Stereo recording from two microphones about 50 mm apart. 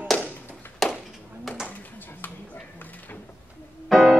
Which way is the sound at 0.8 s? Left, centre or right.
Centre.